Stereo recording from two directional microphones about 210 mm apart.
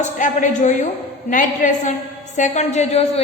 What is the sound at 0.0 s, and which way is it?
A woman's voice, 35° left (ahead or behind).